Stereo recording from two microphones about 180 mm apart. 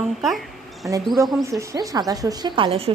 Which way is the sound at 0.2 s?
Centre (ahead or behind).